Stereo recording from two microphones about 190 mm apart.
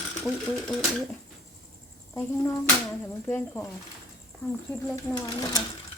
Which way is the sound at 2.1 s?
15° left (ahead or behind).